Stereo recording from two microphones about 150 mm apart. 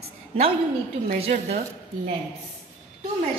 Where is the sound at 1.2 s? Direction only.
45° right (ahead or behind).